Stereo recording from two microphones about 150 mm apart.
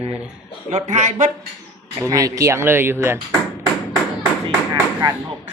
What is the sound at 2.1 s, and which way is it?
Speech, 25° right (ahead or behind).